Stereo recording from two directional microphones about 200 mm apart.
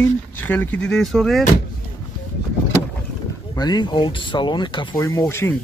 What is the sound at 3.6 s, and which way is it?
Speech, 20° left (ahead or behind).